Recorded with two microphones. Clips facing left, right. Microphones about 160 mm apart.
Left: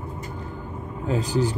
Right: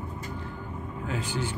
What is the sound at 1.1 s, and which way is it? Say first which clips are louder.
Speech: left 9 dB; 35° left (ahead or behind).